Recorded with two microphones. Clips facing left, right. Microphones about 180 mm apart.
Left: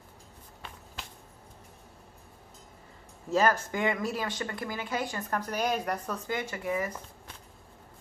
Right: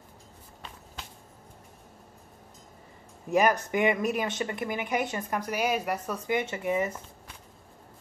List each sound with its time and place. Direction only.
3.3 s speech: 15° right (ahead or behind)